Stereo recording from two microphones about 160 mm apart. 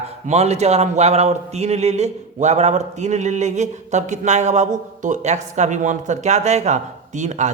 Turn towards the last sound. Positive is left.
turn(degrees=-45)  # may be behind; listen again after turning